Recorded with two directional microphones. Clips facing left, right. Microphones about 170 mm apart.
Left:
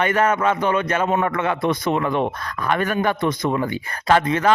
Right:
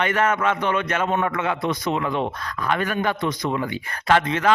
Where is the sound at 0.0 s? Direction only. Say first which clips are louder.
Left 2 dB; 40° left (ahead or behind).